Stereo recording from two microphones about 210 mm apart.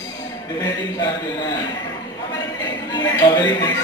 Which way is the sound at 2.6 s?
20° left (ahead or behind).